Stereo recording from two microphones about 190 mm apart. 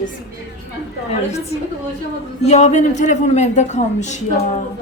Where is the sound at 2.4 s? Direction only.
35° left (ahead or behind).